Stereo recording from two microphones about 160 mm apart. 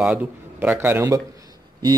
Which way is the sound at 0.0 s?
10° right (ahead or behind).